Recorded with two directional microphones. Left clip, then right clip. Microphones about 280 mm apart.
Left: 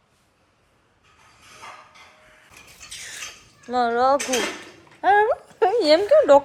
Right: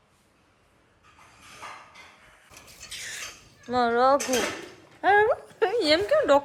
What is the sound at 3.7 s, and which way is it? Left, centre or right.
A woman's voice, centre.